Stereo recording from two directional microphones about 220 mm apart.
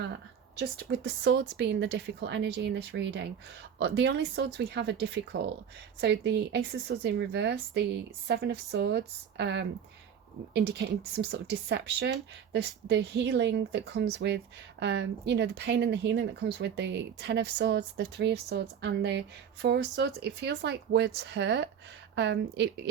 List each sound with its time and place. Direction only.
0.6 s speech: 50° right (ahead or behind)